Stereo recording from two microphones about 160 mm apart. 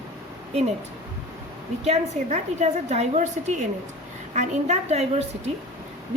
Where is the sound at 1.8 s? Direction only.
45° right (ahead or behind).